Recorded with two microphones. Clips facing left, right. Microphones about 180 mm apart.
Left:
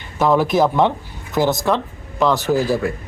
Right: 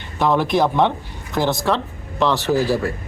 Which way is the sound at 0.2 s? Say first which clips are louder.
Left 2 dB; centre (ahead or behind).